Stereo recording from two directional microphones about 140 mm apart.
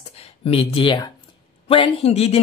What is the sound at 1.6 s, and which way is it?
Speech, 45° left (ahead or behind).